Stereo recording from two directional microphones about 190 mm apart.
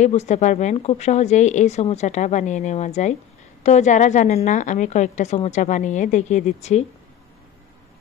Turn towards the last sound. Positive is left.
turn(degrees=35)  # may be behind; listen again after turning